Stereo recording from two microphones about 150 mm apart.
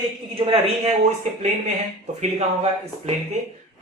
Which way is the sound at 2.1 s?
45° right (ahead or behind).